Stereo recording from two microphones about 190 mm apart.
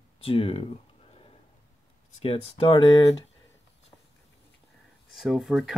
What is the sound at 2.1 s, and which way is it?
Speech, 30° left (ahead or behind).